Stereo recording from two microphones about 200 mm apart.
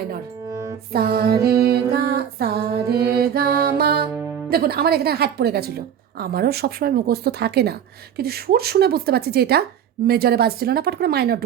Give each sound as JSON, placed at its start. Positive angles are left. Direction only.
{"t": 0.5, "sound": "music", "side_deg": -15}
{"t": 0.9, "sound": "a woman's voice", "side_deg": -50}